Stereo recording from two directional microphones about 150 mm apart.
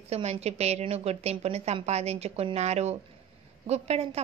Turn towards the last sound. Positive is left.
turn(degrees=-45)  # may be behind; listen again after turning